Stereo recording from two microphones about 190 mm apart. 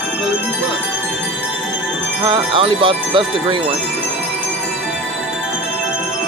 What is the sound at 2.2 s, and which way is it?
Speech, 25° right (ahead or behind).